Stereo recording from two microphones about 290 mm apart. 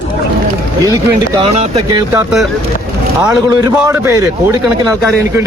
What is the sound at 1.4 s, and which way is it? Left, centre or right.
A man's voice, centre.